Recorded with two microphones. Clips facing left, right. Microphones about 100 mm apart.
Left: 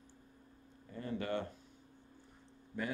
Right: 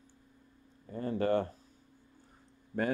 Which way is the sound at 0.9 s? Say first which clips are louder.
Right 8 dB; 40° right (ahead or behind).